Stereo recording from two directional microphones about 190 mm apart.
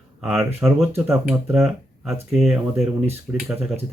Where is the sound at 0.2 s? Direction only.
10° right (ahead or behind).